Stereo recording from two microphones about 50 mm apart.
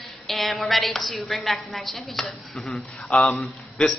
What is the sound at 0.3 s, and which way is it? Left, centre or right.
A woman's voice, centre.